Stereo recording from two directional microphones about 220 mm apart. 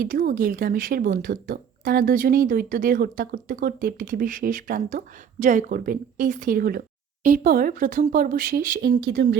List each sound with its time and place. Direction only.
0.0 s speech: 40° right (ahead or behind)